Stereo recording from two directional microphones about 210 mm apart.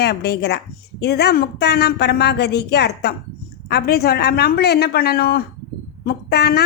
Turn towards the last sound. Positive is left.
turn(degrees=50)  # may be behind; listen again after turning